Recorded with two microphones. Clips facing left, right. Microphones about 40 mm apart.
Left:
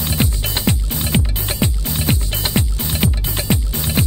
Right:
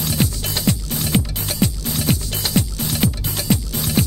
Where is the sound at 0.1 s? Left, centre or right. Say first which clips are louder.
Left 2 dB; left.